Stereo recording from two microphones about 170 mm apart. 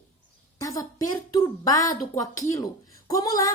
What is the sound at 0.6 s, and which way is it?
A woman's voice, 20° left (ahead or behind).